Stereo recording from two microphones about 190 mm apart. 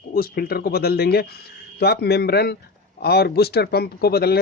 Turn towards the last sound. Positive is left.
turn(degrees=55)  # may be behind; listen again after turning